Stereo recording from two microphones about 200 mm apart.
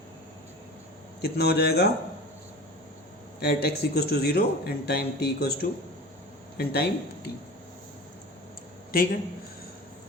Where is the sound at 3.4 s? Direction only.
50° left (ahead or behind).